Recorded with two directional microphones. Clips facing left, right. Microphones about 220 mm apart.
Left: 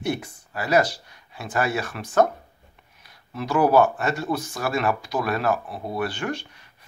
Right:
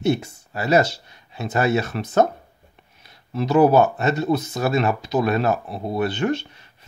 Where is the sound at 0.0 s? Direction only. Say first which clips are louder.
Right 6 dB; 25° right (ahead or behind).